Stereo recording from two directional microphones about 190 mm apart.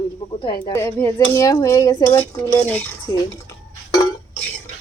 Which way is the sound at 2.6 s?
10° left (ahead or behind).